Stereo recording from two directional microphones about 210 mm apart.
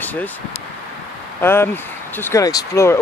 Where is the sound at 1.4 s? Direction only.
10° left (ahead or behind).